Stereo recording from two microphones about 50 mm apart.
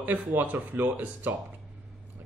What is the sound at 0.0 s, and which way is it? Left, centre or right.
A man's voice, right.